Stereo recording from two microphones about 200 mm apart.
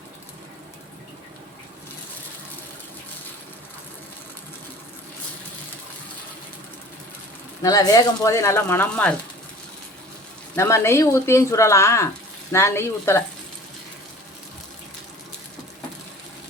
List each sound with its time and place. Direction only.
7.6 s speech: 20° left (ahead or behind)
10.5 s speech: 15° left (ahead or behind)